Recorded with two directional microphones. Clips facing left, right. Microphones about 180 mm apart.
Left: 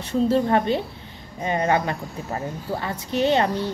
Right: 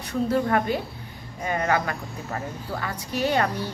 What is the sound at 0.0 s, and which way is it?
A woman's voice, 25° left (ahead or behind).